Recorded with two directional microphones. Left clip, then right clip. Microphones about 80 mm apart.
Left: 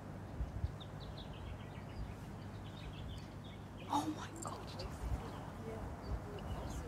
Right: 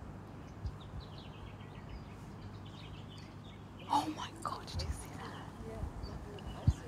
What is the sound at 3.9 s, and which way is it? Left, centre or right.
Whispering, left.